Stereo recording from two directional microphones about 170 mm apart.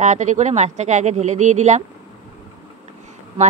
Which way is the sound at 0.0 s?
45° right (ahead or behind).